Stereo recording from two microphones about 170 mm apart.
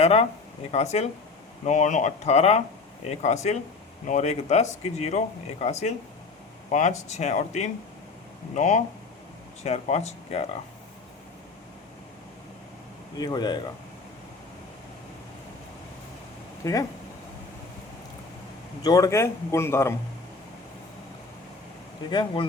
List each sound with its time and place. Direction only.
0.0 s speech: 40° left (ahead or behind)
13.1 s speech: 25° left (ahead or behind)
16.6 s a man's voice: 20° left (ahead or behind)
18.8 s a man's voice: 20° left (ahead or behind)
22.1 s speech: 25° left (ahead or behind)